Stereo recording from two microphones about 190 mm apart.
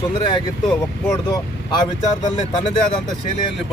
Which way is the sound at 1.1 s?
20° left (ahead or behind).